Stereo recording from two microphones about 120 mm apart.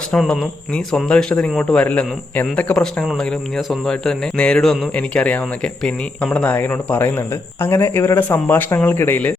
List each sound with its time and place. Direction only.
0.1 s a man's voice: 5° left (ahead or behind)